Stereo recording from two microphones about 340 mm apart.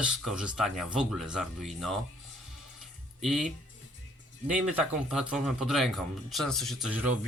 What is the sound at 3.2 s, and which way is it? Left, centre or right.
Speech, centre.